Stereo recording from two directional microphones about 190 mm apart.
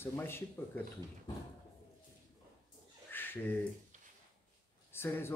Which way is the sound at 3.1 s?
10° left (ahead or behind).